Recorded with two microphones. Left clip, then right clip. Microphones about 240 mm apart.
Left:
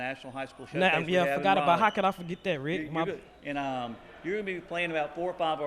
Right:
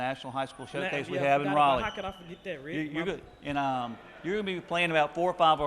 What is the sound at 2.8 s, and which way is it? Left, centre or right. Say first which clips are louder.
A man's voice: left 1 dB; right.